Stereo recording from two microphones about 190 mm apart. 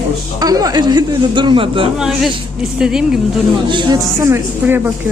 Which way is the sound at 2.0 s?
Centre (ahead or behind).